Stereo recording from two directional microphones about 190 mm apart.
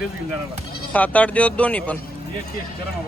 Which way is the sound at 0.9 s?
10° left (ahead or behind).